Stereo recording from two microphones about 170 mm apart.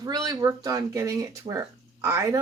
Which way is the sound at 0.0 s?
20° right (ahead or behind).